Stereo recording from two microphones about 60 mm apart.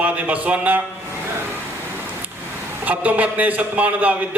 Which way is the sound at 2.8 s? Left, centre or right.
Right.